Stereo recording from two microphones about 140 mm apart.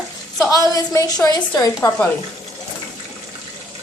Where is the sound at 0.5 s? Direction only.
25° left (ahead or behind).